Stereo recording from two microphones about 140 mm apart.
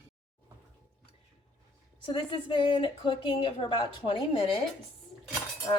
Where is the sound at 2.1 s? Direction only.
35° left (ahead or behind).